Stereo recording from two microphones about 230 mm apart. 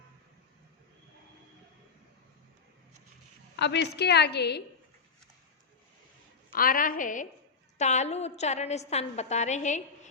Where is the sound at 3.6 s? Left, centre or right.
Left.